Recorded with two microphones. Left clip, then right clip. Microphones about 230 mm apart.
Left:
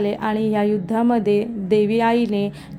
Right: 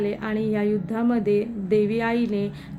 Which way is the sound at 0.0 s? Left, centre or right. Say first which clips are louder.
Left 5 dB; left.